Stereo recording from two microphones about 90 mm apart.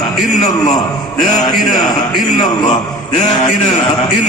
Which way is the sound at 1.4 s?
50° left (ahead or behind).